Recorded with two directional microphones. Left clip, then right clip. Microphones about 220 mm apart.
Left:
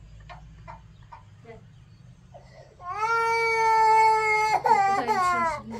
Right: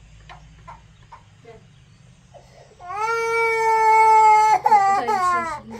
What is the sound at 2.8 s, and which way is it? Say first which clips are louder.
Cat: right 2 dB; 40° right (ahead or behind).